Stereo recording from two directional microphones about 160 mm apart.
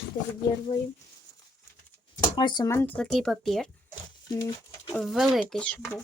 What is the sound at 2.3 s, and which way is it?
Speech, 30° left (ahead or behind).